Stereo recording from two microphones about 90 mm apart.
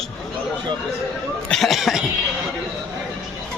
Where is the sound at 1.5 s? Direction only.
Centre (ahead or behind).